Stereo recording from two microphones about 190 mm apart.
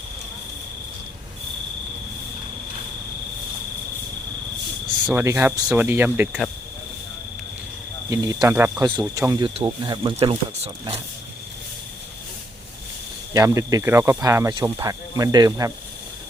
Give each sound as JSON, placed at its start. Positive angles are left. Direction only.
{"t": 5.1, "sound": "speech", "side_deg": -15}
{"t": 8.1, "sound": "speech", "side_deg": -20}
{"t": 13.3, "sound": "speech", "side_deg": -15}